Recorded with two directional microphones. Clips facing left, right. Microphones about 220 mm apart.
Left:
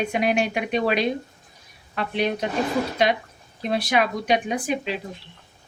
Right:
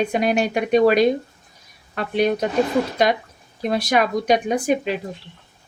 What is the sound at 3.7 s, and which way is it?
Speech, 45° right (ahead or behind).